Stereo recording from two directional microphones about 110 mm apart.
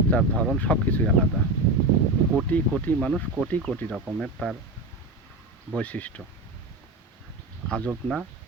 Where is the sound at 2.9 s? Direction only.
15° left (ahead or behind).